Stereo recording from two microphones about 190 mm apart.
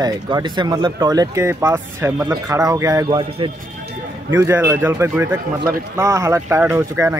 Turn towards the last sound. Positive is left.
turn(degrees=-15)  # may be behind; listen again after turning